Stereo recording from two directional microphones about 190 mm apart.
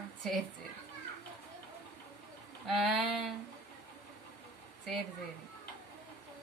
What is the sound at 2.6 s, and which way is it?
Speech, centre (ahead or behind).